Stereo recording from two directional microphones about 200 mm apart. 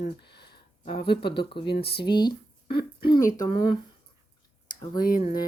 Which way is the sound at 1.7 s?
50° left (ahead or behind).